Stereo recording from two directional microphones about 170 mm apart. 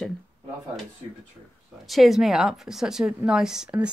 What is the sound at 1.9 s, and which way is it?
A woman's voice, centre (ahead or behind).